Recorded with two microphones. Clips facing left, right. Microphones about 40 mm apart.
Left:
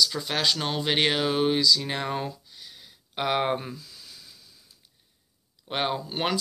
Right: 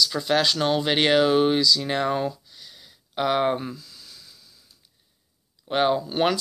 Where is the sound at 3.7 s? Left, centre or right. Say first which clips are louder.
Right 1 dB; left.